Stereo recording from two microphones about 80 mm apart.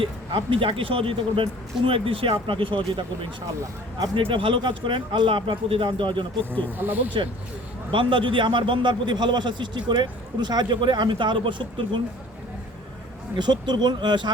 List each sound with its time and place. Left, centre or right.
0.0 s speech: right
4.1 s speech: right
6.7 s speech: right
7.9 s a man's voice: right
13.3 s speech: right